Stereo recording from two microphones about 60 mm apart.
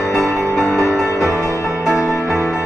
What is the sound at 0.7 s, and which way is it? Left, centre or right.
Music, left.